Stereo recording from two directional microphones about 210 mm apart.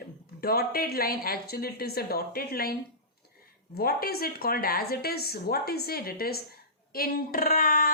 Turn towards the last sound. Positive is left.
turn(degrees=40)  # may be behind; listen again after turning